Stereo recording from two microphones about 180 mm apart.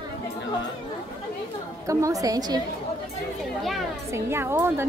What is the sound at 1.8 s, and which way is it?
Speech, 20° right (ahead or behind).